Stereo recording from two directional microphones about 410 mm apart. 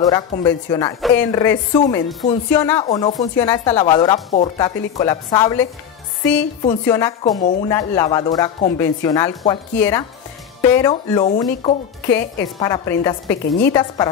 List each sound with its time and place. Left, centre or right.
0.0 s speech: centre
6.8 s speech: centre
7.3 s speech: centre
7.7 s speech: centre